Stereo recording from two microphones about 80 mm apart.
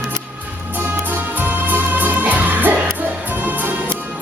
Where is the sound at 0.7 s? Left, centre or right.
Right.